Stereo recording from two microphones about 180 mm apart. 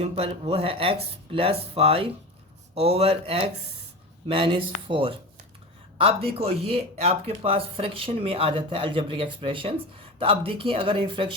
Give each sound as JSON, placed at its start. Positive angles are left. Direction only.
{"t": 0.0, "sound": "speech", "side_deg": -35}